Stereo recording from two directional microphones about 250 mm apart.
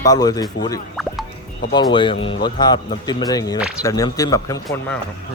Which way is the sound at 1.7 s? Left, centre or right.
Centre.